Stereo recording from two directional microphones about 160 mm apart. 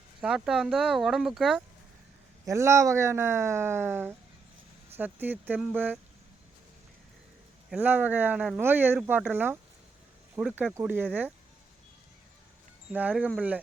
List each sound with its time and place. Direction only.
0.2 s speech: 5° right (ahead or behind)
2.5 s speech: 20° right (ahead or behind)
7.7 s speech: 10° right (ahead or behind)
12.9 s speech: 10° right (ahead or behind)